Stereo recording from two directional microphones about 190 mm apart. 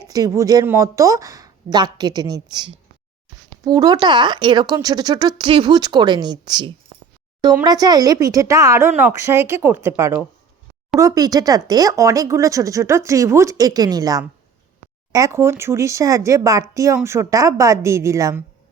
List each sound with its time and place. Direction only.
0.0 s speech: 20° right (ahead or behind)